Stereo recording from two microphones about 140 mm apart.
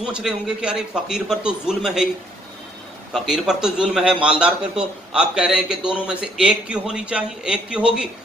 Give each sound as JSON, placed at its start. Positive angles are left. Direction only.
{"t": 0.0, "sound": "a man's voice", "side_deg": -5}
{"t": 3.1, "sound": "a man's voice", "side_deg": 0}